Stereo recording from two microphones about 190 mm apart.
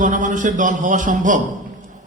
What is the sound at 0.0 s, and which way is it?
A man's voice, 40° right (ahead or behind).